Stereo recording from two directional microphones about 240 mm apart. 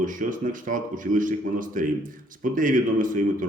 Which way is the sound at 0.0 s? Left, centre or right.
Right.